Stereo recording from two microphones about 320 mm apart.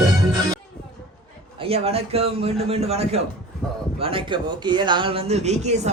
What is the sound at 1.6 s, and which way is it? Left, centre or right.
Speech, centre.